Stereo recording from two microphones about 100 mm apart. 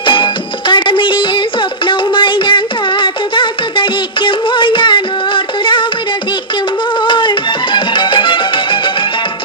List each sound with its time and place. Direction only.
0.0 s music: 55° left (ahead or behind)
7.0 s music: 55° left (ahead or behind)